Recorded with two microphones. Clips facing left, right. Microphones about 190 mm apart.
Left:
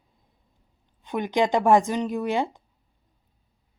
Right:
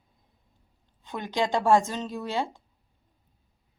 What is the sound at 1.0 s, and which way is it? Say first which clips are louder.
A woman's voice: left 5 dB; 15° left (ahead or behind).